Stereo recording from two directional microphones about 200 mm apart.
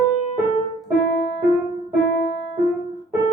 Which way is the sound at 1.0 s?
55° left (ahead or behind).